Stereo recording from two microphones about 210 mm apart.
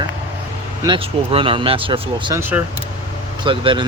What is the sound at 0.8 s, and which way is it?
Speech, 25° right (ahead or behind).